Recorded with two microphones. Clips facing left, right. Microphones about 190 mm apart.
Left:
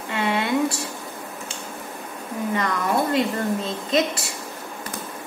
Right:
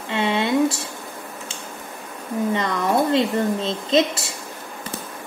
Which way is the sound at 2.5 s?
25° right (ahead or behind).